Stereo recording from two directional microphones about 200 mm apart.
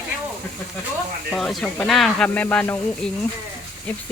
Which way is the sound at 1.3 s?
Centre (ahead or behind).